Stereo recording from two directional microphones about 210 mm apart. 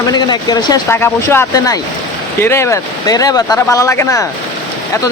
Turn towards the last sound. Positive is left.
turn(degrees=15)  # may be behind; listen again after turning